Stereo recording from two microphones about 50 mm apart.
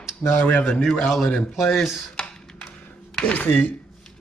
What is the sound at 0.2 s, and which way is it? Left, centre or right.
Speech, left.